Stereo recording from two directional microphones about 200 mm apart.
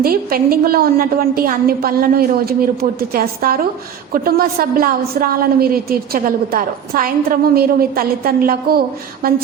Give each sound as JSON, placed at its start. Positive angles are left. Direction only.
{"t": 0.0, "sound": "a woman's voice", "side_deg": -45}